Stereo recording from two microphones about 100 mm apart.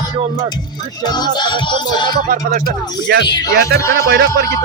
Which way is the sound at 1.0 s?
45° left (ahead or behind).